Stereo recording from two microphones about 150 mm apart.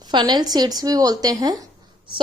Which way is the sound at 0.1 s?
30° right (ahead or behind).